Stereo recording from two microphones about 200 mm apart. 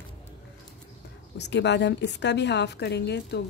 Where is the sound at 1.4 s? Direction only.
60° left (ahead or behind).